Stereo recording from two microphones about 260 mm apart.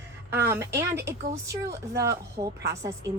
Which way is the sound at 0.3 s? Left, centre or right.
Centre.